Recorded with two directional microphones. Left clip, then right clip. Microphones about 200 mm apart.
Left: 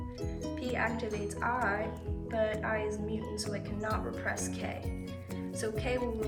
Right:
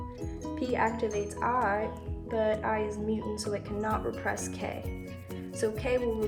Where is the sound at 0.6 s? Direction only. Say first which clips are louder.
Right 5 dB; 50° right (ahead or behind).